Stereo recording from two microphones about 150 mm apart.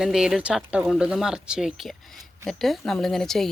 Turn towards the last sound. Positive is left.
turn(degrees=0)  # may be behind; listen again after turning